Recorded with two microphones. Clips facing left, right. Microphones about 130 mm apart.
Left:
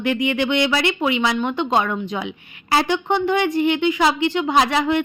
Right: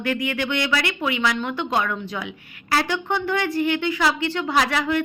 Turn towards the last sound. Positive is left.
turn(degrees=20)  # may be behind; listen again after turning